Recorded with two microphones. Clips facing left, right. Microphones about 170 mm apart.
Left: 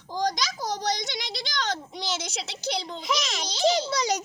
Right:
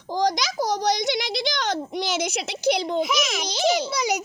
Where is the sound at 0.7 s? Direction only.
75° right (ahead or behind).